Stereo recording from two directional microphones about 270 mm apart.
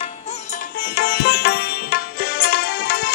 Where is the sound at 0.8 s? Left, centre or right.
Left.